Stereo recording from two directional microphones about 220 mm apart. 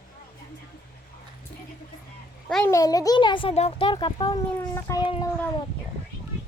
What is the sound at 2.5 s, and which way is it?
A child's voice, 10° left (ahead or behind).